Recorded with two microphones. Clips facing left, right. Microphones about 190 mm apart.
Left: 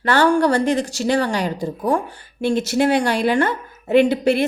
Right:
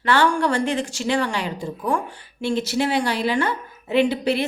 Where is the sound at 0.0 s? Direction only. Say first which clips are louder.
Left 4 dB; 40° left (ahead or behind).